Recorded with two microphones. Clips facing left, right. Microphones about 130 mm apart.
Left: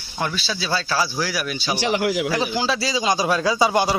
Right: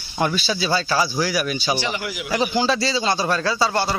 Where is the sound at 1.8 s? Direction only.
85° left.